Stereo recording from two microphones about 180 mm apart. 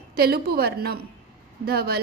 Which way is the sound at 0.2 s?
60° right (ahead or behind).